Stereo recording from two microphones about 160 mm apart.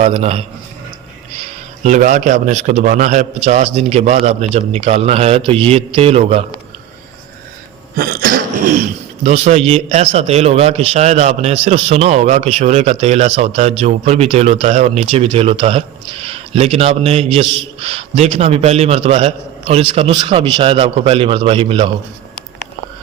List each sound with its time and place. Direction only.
0.0 s a man's voice: 40° right (ahead or behind)
7.9 s cough: 65° right (ahead or behind)
9.2 s a man's voice: 45° right (ahead or behind)